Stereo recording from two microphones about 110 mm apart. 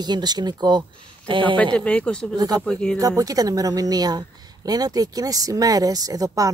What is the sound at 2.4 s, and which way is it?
Speech, 35° right (ahead or behind).